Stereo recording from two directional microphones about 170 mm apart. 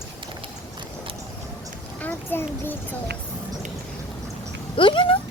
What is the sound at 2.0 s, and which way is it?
Speech, 10° left (ahead or behind).